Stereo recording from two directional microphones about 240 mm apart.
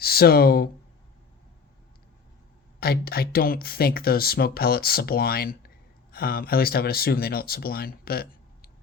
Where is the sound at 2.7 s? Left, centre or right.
Left.